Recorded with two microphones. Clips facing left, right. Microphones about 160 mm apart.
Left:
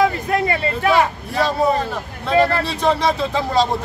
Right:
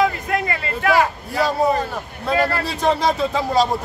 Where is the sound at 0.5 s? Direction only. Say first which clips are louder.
Left 1 dB; 25° left (ahead or behind).